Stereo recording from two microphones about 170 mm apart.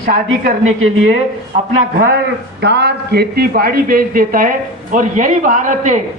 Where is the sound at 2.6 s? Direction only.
80° right.